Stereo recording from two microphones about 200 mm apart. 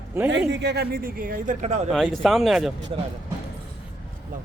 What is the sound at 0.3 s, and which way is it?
Speech, 65° right (ahead or behind).